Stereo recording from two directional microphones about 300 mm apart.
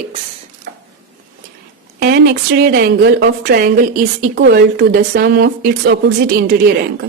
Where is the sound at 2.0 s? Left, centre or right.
Right.